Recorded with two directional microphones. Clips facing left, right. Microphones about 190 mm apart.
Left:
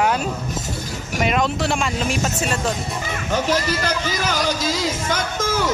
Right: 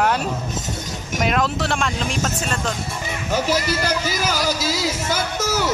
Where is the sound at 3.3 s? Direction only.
10° right (ahead or behind).